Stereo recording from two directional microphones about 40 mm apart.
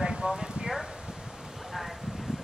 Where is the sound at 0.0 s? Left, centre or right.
Right.